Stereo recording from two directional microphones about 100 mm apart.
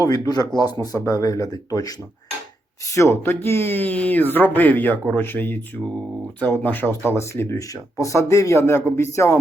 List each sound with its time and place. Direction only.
0.0 s speech: 40° left (ahead or behind)